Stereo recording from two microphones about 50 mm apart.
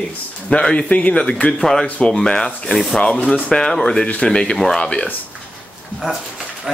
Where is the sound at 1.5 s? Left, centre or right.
Centre.